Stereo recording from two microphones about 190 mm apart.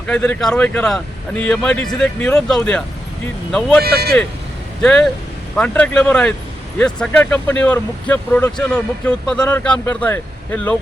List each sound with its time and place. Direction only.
0.1 s speech: 5° left (ahead or behind)
3.8 s speech: 55° right (ahead or behind)
4.8 s speech: 5° left (ahead or behind)